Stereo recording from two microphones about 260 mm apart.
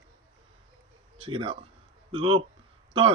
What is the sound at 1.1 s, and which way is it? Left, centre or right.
Speech, right.